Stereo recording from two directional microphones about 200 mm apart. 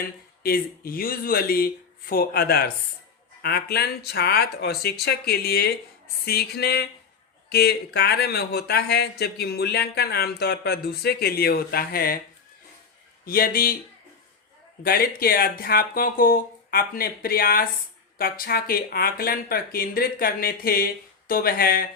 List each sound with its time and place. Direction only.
0.0 s speech: 50° left (ahead or behind)
13.2 s speech: 45° left (ahead or behind)
14.8 s speech: 50° left (ahead or behind)